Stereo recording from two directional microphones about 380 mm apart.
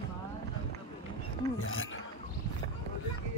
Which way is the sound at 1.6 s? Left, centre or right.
Left.